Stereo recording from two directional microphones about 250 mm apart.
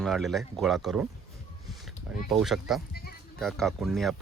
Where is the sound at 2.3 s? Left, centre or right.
Centre.